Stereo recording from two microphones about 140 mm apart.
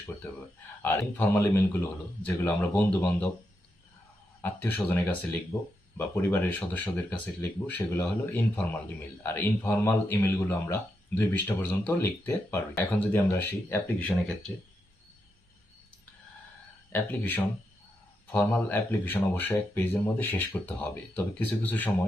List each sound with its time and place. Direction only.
0.8 s speech: 15° left (ahead or behind)
4.4 s speech: 15° left (ahead or behind)
16.9 s speech: 10° left (ahead or behind)